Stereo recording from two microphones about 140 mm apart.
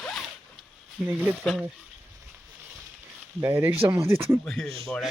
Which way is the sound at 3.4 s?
15° right (ahead or behind).